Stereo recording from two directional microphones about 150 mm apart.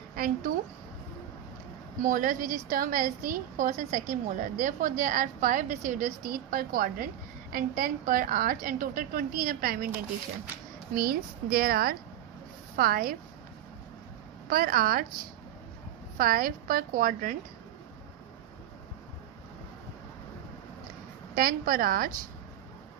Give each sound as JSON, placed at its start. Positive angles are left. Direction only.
{"t": 2.0, "sound": "a woman's voice", "side_deg": -60}
{"t": 10.9, "sound": "a woman's voice", "side_deg": -80}
{"t": 14.5, "sound": "a woman's voice", "side_deg": -75}
{"t": 21.3, "sound": "a woman's voice", "side_deg": -75}